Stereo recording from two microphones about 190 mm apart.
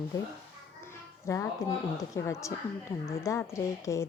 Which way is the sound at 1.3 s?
15° left (ahead or behind).